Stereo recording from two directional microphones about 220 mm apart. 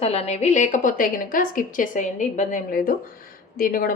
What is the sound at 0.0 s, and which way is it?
A woman's voice, 30° left (ahead or behind).